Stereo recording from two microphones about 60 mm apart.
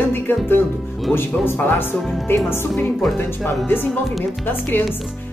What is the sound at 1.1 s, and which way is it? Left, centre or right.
Speech, left.